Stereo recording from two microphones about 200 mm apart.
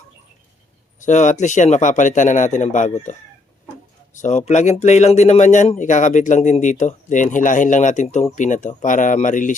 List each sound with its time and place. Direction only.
1.0 s speech: 40° left (ahead or behind)